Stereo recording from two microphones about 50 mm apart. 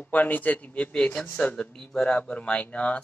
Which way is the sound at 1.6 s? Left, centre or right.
Centre.